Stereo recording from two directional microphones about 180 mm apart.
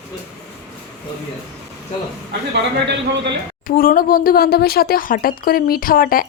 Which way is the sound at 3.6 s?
50° left (ahead or behind).